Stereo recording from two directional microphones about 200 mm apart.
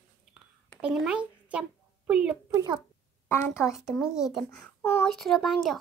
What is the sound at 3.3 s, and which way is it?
Speech, 10° left (ahead or behind).